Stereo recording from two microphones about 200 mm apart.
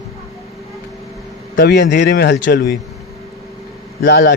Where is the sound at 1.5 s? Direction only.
55° left (ahead or behind).